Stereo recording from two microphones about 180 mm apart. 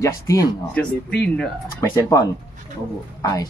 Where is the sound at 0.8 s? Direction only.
5° left (ahead or behind).